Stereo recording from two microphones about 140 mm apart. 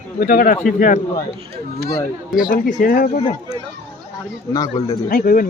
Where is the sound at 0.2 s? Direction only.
90° left; by 0.9 s 75° left (ahead or behind).